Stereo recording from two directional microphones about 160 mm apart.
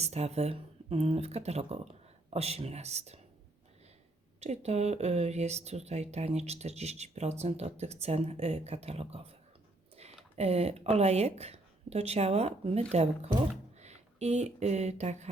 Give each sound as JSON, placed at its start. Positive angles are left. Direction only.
{"t": 0.0, "sound": "speech", "side_deg": -40}
{"t": 4.4, "sound": "speech", "side_deg": -45}
{"t": 10.3, "sound": "speech", "side_deg": -40}